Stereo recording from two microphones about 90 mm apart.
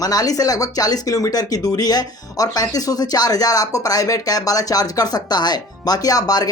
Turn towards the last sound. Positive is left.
turn(degrees=45)  # may be behind; listen again after turning